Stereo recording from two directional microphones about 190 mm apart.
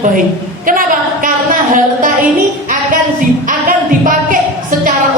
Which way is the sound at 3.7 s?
45° right (ahead or behind).